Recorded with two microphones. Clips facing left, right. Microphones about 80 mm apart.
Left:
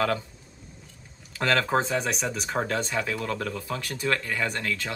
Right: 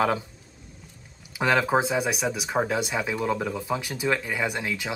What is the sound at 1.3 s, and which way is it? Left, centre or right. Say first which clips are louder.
Speech: right 2 dB; centre.